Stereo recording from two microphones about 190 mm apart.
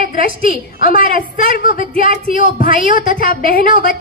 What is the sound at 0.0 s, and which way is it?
A woman's voice, 45° left (ahead or behind).